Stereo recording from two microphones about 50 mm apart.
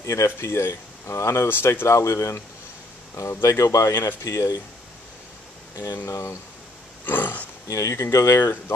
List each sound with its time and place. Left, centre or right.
0.0 s speech: left
1.5 s speech: left
3.9 s speech: left
6.0 s speech: left
7.1 s roaring cats: left
7.7 s speech: left
8.4 s speech: left